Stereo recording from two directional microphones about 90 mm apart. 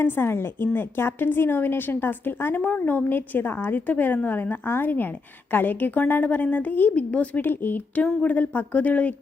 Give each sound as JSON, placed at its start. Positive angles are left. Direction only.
{"t": 0.0, "sound": "a woman's voice", "side_deg": 25}